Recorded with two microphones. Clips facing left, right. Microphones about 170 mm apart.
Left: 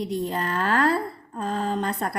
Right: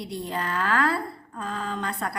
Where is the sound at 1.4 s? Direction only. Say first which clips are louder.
Left 5 dB; 40° left (ahead or behind).